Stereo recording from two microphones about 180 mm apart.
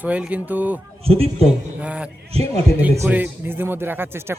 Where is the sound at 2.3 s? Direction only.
35° right (ahead or behind).